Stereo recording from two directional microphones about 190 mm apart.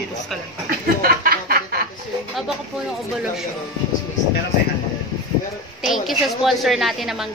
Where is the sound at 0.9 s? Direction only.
50° right (ahead or behind).